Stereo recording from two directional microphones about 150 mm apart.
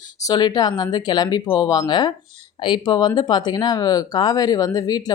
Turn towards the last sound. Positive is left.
turn(degrees=25)  # may be behind; listen again after turning